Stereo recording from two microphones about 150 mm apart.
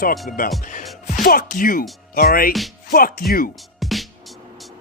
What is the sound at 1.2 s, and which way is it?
Speech, 75° left (ahead or behind).